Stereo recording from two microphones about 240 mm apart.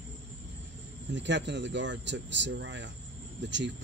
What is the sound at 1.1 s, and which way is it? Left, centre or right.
Speech, right.